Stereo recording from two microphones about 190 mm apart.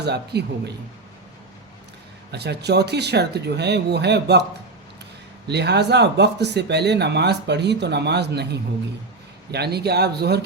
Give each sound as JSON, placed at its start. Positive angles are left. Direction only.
{"t": 0.0, "sound": "speech", "side_deg": -60}
{"t": 2.3, "sound": "speech", "side_deg": -60}
{"t": 5.5, "sound": "speech", "side_deg": -60}